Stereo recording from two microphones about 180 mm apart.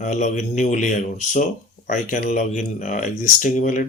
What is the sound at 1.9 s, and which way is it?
Speech, 45° left (ahead or behind).